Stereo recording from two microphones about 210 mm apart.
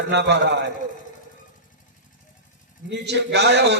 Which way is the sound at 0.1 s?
55° right (ahead or behind).